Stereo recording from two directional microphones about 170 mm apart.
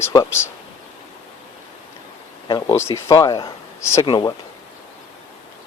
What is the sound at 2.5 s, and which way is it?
Speech, 25° left (ahead or behind).